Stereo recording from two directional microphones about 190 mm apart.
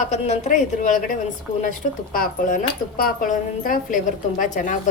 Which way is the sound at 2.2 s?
45° left (ahead or behind).